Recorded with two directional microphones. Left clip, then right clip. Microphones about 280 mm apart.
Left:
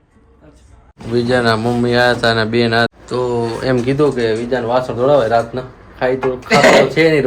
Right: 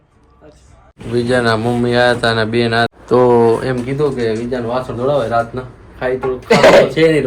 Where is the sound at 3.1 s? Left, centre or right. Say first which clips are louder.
Right 8 dB; centre.